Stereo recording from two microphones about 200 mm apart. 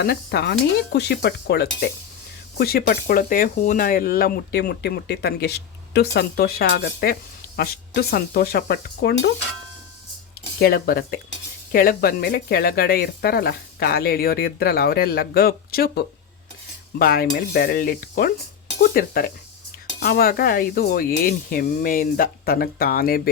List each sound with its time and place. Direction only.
0.0 s speech: 50° left (ahead or behind)
10.6 s speech: 50° left (ahead or behind)